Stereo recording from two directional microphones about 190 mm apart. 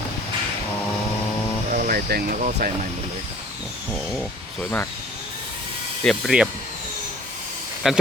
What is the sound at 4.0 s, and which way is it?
Speech, centre (ahead or behind).